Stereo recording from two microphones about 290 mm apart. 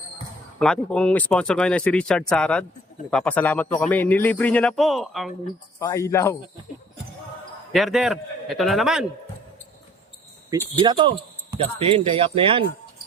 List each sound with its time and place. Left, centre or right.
0.6 s speech: centre
7.7 s speech: centre
10.8 s speech: centre